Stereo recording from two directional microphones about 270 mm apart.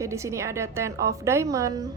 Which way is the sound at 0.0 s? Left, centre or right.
Centre.